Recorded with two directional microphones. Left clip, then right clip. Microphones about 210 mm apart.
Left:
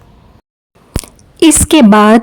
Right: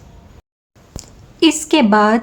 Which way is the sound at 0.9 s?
45° left (ahead or behind).